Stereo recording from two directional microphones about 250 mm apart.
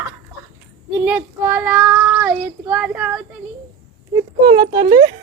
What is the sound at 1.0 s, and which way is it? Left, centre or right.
Child singing, centre.